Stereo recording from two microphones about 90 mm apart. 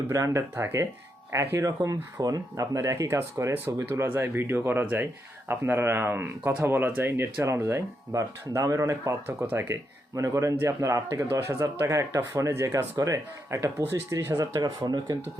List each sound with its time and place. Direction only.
0.1 s a man's voice: 35° right (ahead or behind)
9.2 s speech: 20° right (ahead or behind)
10.2 s a man's voice: 35° right (ahead or behind)
14.3 s speech: 45° right (ahead or behind)